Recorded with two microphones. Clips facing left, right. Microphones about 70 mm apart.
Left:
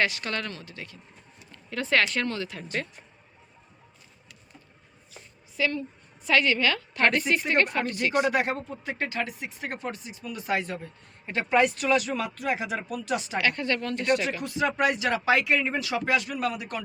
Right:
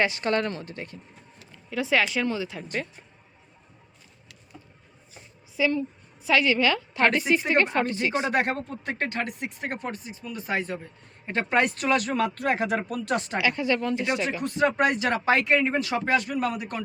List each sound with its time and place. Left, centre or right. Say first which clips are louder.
0.0 s speech: right 4 dB; right
1.7 s a woman's voice: right 1 dB; centre
5.5 s a woman's voice: right 3 dB; centre
8.3 s speech: right 1 dB; right
9.6 s speech: left 1 dB; right
11.3 s speech: left 1 dB; right
13.4 s a woman's voice: right 2 dB; centre
14.4 s speech: right 6 dB; right